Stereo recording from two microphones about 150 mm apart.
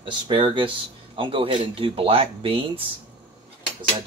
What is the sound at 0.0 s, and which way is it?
Speech, 35° right (ahead or behind).